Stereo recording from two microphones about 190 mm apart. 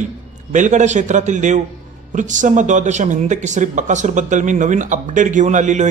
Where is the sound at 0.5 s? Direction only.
40° right (ahead or behind).